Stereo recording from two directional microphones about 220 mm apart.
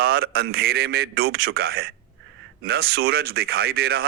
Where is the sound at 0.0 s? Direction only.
45° right (ahead or behind).